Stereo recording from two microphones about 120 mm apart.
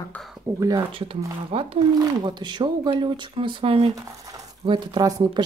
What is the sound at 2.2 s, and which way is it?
Speech, 40° right (ahead or behind).